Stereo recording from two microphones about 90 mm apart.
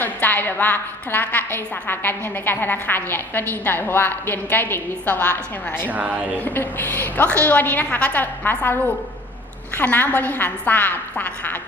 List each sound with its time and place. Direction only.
0.0 s a woman's voice: 20° left (ahead or behind)
5.9 s speech: 15° right (ahead or behind)
6.4 s a woman's voice: 20° left (ahead or behind)